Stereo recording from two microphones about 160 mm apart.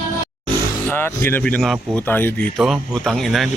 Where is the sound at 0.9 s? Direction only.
15° left (ahead or behind).